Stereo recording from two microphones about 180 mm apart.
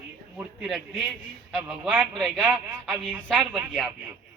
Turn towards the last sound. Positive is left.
turn(degrees=0)  # may be behind; listen again after turning